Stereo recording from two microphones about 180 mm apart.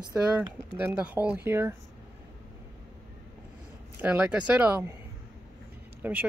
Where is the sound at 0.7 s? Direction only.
10° right (ahead or behind).